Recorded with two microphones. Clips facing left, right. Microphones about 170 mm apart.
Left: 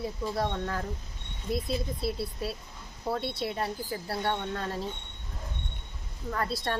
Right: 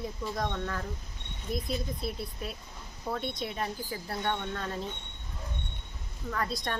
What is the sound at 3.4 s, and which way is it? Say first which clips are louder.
Speech: left 3 dB; 30° left (ahead or behind).